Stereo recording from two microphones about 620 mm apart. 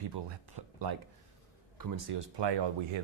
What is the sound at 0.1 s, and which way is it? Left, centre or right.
Speech, right.